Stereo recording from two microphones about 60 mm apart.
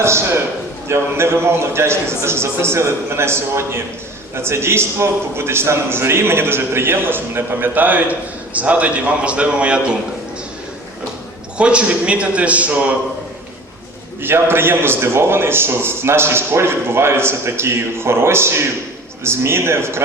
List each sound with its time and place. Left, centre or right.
0.0 s a sound: right
0.9 s a man's voice: right; by 9.8 s centre
11.5 s a man's voice: centre
14.2 s a man's voice: right